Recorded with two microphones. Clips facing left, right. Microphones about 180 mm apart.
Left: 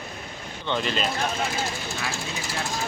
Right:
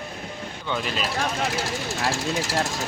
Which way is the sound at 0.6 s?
5° right (ahead or behind).